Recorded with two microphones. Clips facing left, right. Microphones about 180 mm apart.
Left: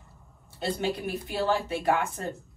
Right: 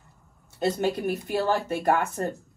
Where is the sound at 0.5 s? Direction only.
45° right (ahead or behind).